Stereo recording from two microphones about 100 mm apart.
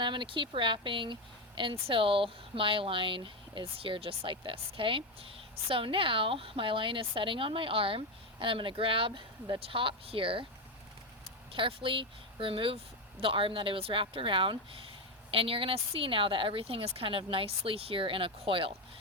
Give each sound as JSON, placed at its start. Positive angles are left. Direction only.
{"t": 0.0, "sound": "speech", "side_deg": -55}
{"t": 11.5, "sound": "speech", "side_deg": -60}